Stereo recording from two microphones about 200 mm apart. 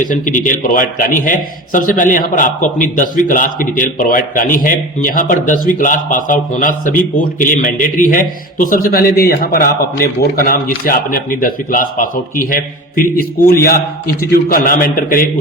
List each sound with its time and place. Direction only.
0.0 s a man's voice: 40° left (ahead or behind)